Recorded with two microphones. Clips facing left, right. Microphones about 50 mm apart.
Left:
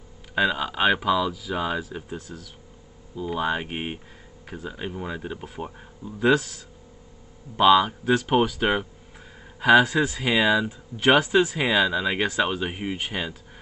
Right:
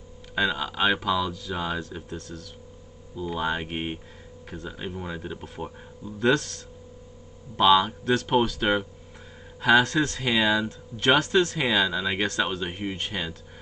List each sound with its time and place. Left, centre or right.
0.3 s speech: centre